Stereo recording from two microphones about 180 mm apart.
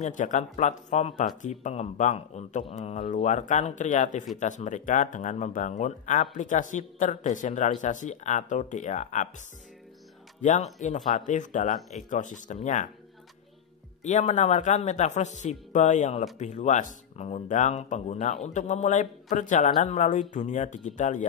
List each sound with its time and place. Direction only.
0.0 s a man's voice: 45° left (ahead or behind)
10.4 s speech: 40° left (ahead or behind)
14.0 s a man's voice: 40° left (ahead or behind)